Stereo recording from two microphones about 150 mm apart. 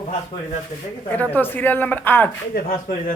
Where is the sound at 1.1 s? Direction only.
10° left (ahead or behind).